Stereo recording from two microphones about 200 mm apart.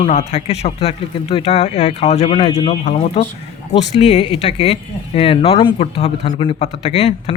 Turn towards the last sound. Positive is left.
turn(degrees=30)  # may be behind; listen again after turning